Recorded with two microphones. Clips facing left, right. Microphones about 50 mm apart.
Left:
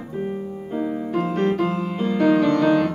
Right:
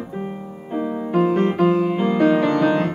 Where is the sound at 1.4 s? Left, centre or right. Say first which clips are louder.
Right 4 dB; right.